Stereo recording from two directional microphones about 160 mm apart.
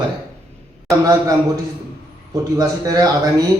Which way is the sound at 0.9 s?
20° right (ahead or behind).